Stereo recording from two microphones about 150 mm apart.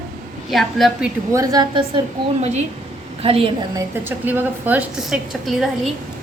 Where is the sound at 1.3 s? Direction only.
25° right (ahead or behind).